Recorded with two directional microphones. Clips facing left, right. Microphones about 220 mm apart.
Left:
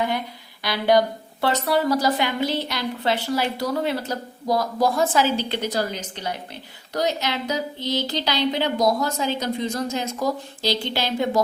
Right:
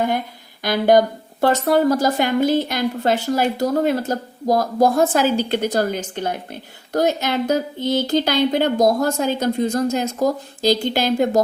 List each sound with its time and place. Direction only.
0.6 s a woman's voice: 50° right (ahead or behind)